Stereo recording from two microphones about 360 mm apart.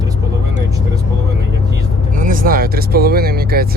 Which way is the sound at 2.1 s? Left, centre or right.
Right.